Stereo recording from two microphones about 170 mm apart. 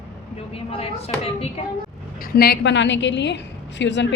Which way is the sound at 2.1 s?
60° left (ahead or behind).